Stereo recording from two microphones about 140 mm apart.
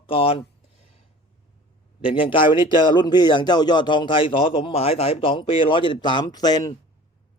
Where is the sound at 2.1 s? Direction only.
40° left (ahead or behind).